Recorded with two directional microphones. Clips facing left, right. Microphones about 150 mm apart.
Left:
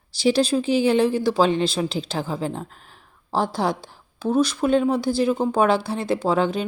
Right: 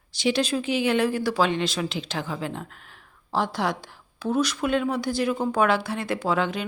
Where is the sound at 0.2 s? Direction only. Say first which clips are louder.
Left 5 dB; 35° left (ahead or behind).